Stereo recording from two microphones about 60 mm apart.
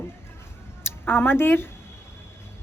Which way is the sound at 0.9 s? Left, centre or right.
Left.